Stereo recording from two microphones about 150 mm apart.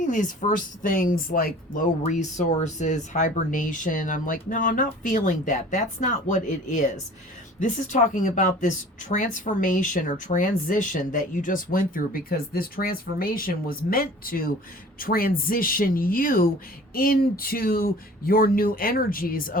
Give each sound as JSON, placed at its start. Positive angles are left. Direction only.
{"t": 0.0, "sound": "speech", "side_deg": 60}
{"t": 2.3, "sound": "speech", "side_deg": 55}
{"t": 16.9, "sound": "speech", "side_deg": 80}